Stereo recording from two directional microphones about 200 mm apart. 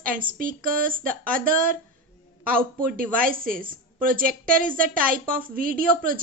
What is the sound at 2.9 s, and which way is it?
A woman's voice, 45° right (ahead or behind).